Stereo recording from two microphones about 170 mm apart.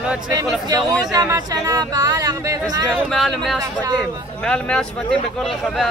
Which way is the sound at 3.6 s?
20° right (ahead or behind).